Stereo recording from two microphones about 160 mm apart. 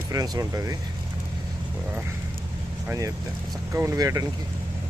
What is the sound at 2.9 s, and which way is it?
Speech, 20° right (ahead or behind).